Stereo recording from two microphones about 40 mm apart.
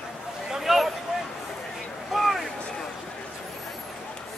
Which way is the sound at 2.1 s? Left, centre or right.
Centre.